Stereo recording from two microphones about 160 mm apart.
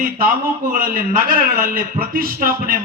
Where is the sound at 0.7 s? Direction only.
60° right (ahead or behind).